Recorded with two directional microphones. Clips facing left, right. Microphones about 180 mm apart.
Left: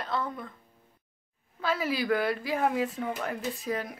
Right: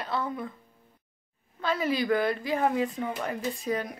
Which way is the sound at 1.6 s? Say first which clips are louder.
Right 2 dB; 5° left (ahead or behind).